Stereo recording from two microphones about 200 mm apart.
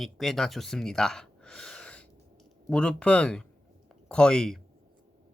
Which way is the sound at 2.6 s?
5° left (ahead or behind).